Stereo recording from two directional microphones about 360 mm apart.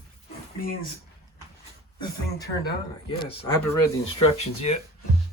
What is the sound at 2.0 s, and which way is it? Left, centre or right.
Speech, centre.